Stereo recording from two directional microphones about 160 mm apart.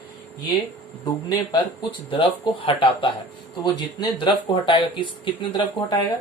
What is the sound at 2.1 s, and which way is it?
Speech, 30° left (ahead or behind).